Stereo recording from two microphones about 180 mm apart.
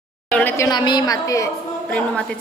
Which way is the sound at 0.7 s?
25° left (ahead or behind).